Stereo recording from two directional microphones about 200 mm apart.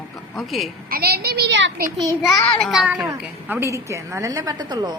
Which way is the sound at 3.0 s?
15° right (ahead or behind).